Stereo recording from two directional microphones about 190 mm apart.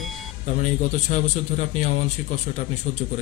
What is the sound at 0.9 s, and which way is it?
A man's voice, 40° left (ahead or behind).